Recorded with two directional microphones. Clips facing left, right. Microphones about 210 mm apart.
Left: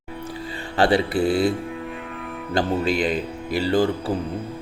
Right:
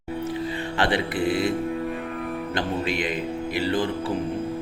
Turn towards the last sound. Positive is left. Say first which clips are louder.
# left 3 dB
turn(degrees=35)  # may be behind; listen again after turning